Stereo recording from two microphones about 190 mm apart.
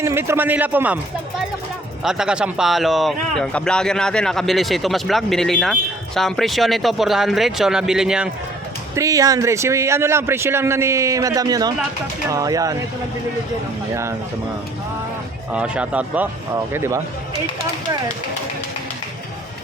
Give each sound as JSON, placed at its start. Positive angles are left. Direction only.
{"t": 0.0, "sound": "a man's voice", "side_deg": -15}
{"t": 2.0, "sound": "speech", "side_deg": -5}
{"t": 9.0, "sound": "a man's voice", "side_deg": -15}
{"t": 15.5, "sound": "a man's voice", "side_deg": -5}